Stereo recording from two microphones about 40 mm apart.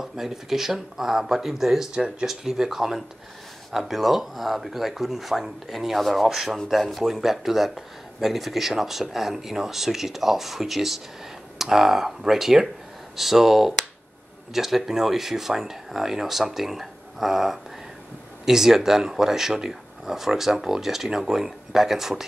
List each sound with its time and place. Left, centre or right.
0.0 s speech: centre
2.0 s speech: right
2.2 s speech: centre